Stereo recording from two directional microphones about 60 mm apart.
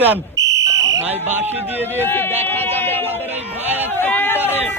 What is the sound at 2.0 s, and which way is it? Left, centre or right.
Speech, left.